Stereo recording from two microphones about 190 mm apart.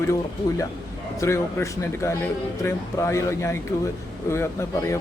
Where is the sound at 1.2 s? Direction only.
15° left (ahead or behind).